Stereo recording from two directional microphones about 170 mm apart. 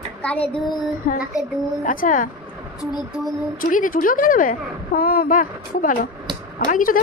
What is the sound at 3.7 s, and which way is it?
A woman's voice, 50° left (ahead or behind).